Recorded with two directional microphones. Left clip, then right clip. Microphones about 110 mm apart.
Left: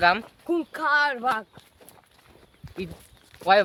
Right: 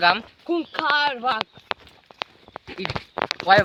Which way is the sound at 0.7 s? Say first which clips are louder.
Right 1 dB; 50° right (ahead or behind).